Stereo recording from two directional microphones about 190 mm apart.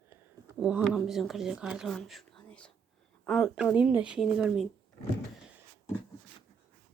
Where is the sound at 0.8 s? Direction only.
Centre (ahead or behind).